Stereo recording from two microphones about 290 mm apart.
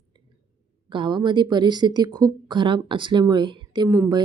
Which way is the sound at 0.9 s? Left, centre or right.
Centre.